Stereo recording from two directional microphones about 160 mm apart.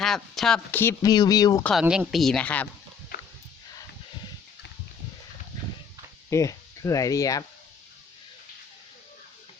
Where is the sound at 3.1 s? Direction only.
65° left (ahead or behind).